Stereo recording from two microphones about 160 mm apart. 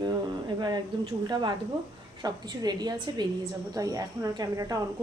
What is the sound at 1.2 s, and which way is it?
Speech, 25° right (ahead or behind).